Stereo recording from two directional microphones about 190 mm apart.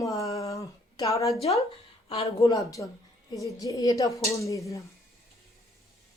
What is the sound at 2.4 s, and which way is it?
Speech, 15° left (ahead or behind).